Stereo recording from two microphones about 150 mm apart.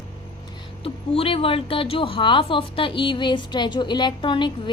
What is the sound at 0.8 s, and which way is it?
A woman's voice, 40° left (ahead or behind).